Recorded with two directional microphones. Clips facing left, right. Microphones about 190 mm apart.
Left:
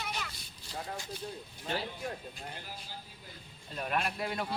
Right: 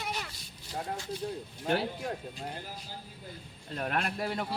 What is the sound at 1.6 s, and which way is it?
Speech, 70° right (ahead or behind).